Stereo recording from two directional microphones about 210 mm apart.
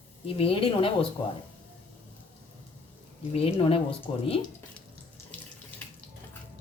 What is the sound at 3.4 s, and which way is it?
Speech, 25° left (ahead or behind).